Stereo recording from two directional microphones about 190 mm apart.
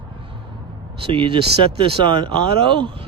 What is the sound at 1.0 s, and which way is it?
Speech, 30° right (ahead or behind).